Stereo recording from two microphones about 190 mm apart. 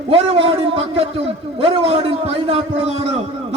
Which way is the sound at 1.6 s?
30° right (ahead or behind).